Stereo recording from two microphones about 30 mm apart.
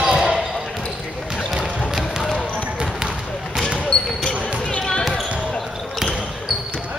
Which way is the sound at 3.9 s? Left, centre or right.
Left.